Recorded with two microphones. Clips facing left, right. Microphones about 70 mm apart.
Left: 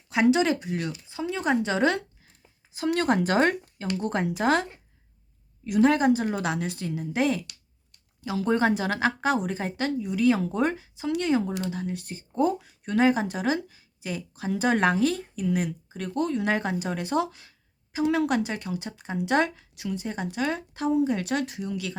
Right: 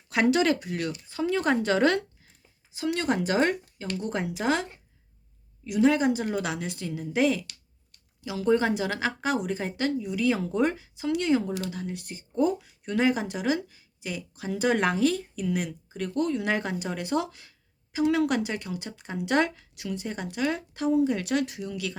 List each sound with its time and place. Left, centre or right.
0.1 s speech: centre
2.7 s speech: left
5.6 s speech: left